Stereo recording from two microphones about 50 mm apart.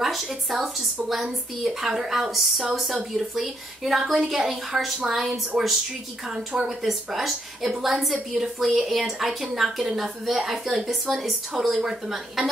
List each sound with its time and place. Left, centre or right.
0.0 s a woman's voice: centre
5.5 s speech: right
6.2 s a woman's voice: centre